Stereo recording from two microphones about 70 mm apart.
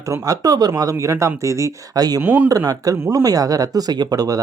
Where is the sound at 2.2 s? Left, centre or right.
Right.